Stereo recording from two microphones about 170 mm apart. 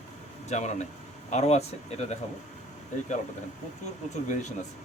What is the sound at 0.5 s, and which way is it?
Speech, 45° left (ahead or behind).